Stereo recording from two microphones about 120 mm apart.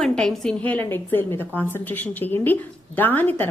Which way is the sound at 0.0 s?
5° left (ahead or behind).